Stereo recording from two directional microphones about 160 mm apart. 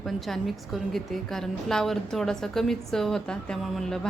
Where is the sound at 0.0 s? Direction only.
Centre (ahead or behind).